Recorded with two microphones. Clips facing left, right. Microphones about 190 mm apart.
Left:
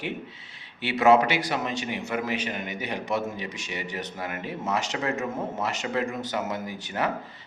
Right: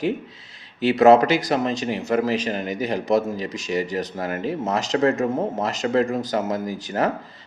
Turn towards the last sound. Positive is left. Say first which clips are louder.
# right 6 dB
turn(degrees=-40)  # may be behind; listen again after turning